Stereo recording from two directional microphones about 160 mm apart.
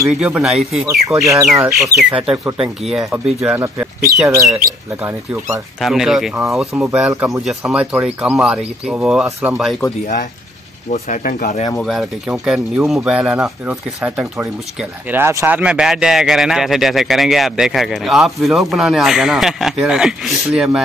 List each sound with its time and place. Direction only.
0.1 s speech: 5° right (ahead or behind)
1.0 s speech: 20° right (ahead or behind)
2.0 s speech: 5° right (ahead or behind)
3.3 s speech: 20° right (ahead or behind)
5.0 s speech: 15° right (ahead or behind)
5.8 s speech: centre (ahead or behind)
10.9 s speech: 50° left (ahead or behind)
11.8 s speech: centre (ahead or behind)